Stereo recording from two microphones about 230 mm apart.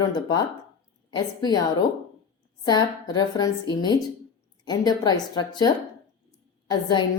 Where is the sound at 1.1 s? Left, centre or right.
Centre.